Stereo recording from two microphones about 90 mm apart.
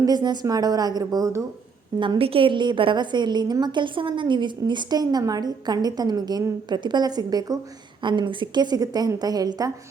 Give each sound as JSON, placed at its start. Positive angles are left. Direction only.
{"t": 0.0, "sound": "a woman's voice", "side_deg": -50}
{"t": 2.0, "sound": "a woman's voice", "side_deg": -75}
{"t": 8.0, "sound": "a woman's voice", "side_deg": -60}